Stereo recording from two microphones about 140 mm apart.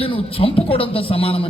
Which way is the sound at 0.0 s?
40° left (ahead or behind).